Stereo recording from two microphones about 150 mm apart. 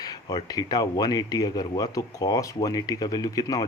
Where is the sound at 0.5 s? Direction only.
25° left (ahead or behind).